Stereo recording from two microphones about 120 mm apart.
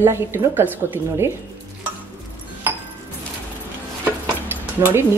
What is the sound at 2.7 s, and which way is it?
Music, 15° right (ahead or behind).